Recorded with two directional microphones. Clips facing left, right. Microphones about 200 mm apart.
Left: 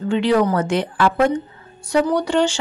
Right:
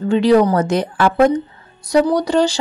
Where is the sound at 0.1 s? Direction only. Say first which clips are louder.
Right 4 dB; 40° right (ahead or behind).